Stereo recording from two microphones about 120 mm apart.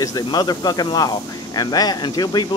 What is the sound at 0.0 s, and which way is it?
Speech, 30° left (ahead or behind).